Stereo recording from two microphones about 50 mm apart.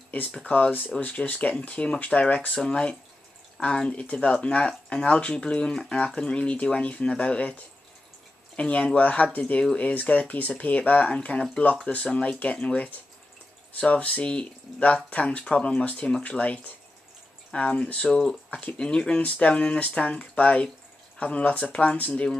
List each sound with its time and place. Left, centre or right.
0.5 s speech: left
8.5 s speech: left